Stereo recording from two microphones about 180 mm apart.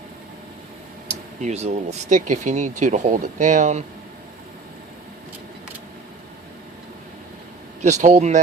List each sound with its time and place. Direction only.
1.4 s speech: 40° right (ahead or behind)
7.8 s speech: 40° right (ahead or behind)